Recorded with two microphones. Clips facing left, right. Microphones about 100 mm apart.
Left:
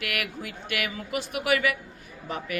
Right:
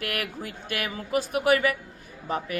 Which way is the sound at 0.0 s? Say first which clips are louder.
Right 1 dB; 35° right (ahead or behind).